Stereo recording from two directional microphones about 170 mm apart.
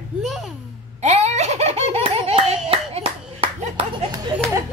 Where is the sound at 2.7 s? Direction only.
35° right (ahead or behind).